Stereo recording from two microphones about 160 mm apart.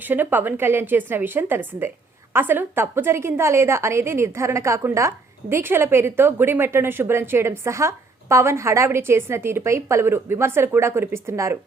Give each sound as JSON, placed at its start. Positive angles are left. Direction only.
{"t": 0.0, "sound": "a woman's voice", "side_deg": -10}